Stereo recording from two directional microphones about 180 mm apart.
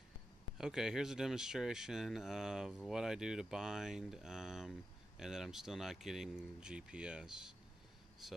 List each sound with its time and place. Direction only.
0.6 s speech: 5° right (ahead or behind)